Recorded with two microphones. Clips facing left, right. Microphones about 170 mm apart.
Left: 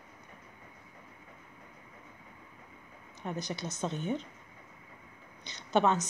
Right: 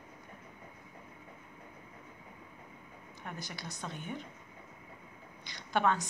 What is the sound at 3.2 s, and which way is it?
Speech, 20° left (ahead or behind).